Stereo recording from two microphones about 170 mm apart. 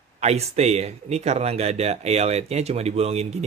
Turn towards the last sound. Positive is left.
turn(degrees=-40)  # may be behind; listen again after turning